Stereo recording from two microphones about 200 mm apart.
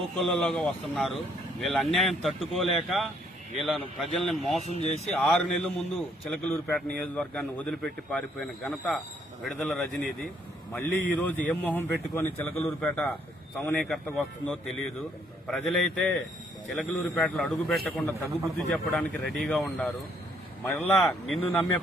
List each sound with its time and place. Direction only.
0.2 s speech: 5° left (ahead or behind)
4.7 s speech: 35° left (ahead or behind)
5.0 s speech: centre (ahead or behind)